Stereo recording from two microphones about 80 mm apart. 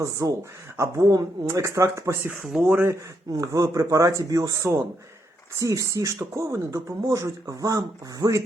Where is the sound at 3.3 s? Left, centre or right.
Right.